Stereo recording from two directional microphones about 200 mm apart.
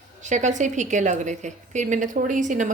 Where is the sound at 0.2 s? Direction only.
35° right (ahead or behind).